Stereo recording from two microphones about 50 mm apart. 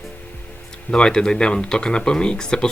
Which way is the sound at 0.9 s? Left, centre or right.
Centre.